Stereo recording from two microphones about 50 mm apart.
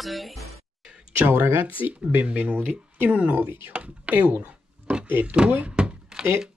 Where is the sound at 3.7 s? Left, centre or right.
Right.